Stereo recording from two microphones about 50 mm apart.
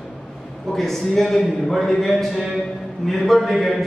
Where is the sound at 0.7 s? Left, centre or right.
Centre.